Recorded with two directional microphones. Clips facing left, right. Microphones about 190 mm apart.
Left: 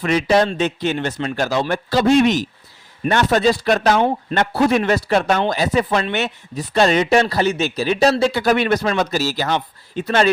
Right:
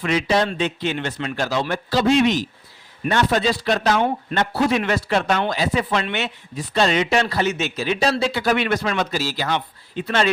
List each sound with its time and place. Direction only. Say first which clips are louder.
0.0 s speech: left 4 dB; 50° left (ahead or behind)
4.4 s speech: left 3 dB; 55° left (ahead or behind)
4.8 s speech: left 4 dB; 40° left (ahead or behind)